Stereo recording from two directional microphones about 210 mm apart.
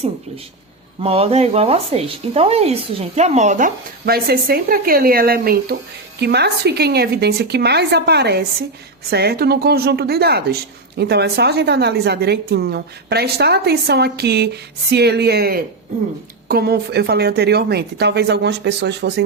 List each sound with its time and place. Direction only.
1.0 s speech: 30° right (ahead or behind); by 19.2 s 55° right (ahead or behind)